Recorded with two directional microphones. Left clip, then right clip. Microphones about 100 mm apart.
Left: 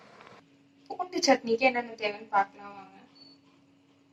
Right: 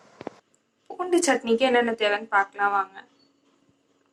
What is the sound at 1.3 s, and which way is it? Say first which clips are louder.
Speech: right 1 dB; 5° left (ahead or behind).